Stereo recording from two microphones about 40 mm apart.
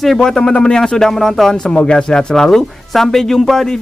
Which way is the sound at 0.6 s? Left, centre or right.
Centre.